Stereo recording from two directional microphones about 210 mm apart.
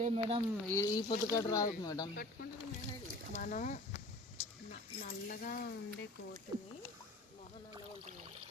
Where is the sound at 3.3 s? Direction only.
35° left (ahead or behind).